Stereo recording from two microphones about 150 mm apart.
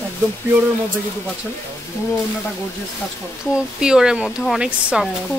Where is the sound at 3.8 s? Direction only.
5° right (ahead or behind).